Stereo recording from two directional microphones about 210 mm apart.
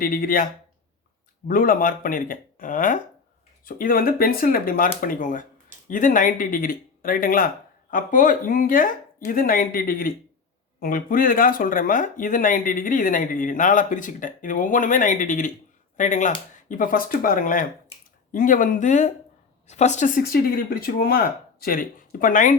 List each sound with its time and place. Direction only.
0.0 s speech: 40° left (ahead or behind)
1.5 s speech: 40° left (ahead or behind)